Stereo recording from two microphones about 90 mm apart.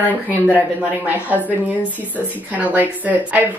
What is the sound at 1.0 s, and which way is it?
Speech, 20° right (ahead or behind).